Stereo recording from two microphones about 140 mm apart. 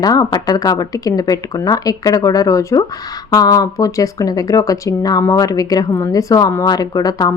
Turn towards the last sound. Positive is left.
turn(degrees=25)  # may be behind; listen again after turning